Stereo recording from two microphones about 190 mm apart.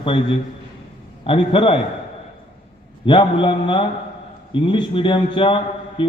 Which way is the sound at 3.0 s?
25° left (ahead or behind).